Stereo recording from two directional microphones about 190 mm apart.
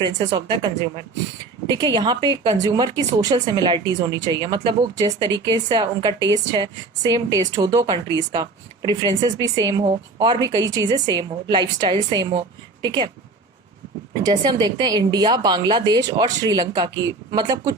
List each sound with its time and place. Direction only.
0.0 s a woman's voice: 20° right (ahead or behind)
14.1 s a woman's voice: 20° right (ahead or behind)